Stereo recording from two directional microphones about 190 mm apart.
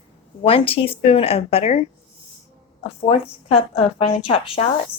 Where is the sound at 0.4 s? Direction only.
30° left (ahead or behind).